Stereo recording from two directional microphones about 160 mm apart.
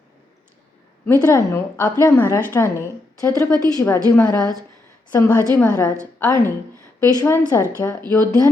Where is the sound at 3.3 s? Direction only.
25° right (ahead or behind).